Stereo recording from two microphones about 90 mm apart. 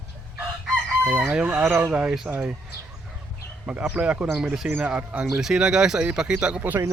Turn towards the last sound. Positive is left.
turn(degrees=-15)  # may be behind; listen again after turning